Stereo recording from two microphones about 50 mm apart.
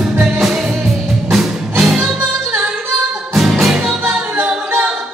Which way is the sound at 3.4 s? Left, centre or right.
Centre.